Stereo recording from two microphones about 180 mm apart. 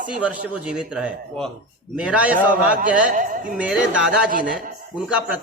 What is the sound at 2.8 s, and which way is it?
Speech, 45° right (ahead or behind).